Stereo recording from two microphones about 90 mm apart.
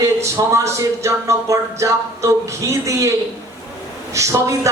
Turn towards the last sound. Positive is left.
turn(degrees=-35)  # may be behind; listen again after turning